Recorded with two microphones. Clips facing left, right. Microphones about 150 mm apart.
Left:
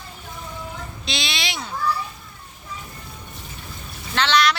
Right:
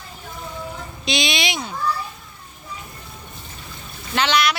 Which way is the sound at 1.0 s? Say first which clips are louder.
Right 7 dB; 15° right (ahead or behind).